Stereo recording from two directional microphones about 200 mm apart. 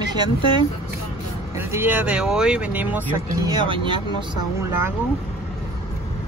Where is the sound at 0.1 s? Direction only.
20° right (ahead or behind).